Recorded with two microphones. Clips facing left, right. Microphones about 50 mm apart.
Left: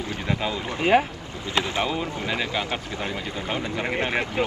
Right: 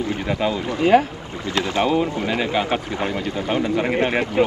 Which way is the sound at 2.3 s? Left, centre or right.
Right.